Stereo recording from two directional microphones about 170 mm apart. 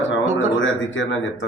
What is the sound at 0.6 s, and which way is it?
Speech, 90° left.